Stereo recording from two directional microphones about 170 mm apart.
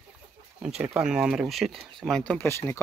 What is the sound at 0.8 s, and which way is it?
Speech, 5° right (ahead or behind).